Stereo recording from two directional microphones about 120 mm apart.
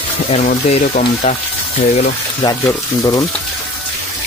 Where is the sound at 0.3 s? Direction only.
65° left (ahead or behind).